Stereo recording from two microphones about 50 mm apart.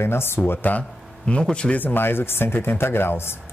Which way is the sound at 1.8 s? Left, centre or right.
Left.